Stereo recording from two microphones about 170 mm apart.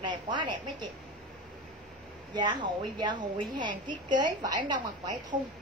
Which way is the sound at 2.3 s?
25° right (ahead or behind).